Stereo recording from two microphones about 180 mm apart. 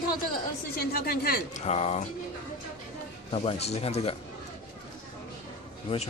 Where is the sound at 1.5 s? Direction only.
35° left (ahead or behind).